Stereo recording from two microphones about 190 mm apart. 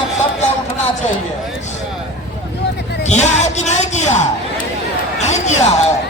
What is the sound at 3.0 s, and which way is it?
Music, 35° left (ahead or behind).